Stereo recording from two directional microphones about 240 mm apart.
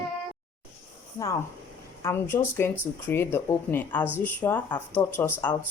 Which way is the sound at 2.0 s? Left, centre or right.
Centre.